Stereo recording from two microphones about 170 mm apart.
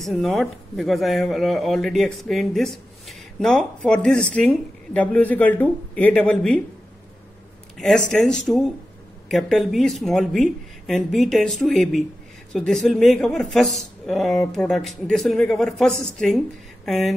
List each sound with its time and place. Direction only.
0.0 s speech: centre (ahead or behind)
7.7 s speech: 5° left (ahead or behind)